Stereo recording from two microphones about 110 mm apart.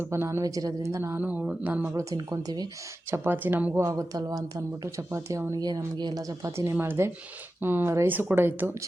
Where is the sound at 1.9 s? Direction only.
30° right (ahead or behind).